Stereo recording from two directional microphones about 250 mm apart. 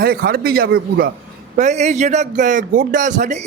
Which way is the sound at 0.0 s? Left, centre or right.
Right.